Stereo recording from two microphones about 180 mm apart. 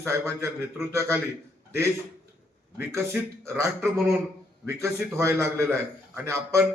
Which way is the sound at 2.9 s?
15° right (ahead or behind).